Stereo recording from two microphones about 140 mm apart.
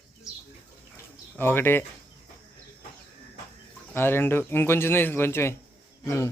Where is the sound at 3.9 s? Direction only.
15° left (ahead or behind).